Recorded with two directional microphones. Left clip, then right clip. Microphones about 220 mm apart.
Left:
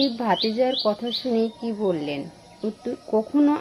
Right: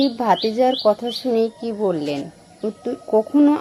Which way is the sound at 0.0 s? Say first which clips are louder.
Right 4 dB; 20° right (ahead or behind).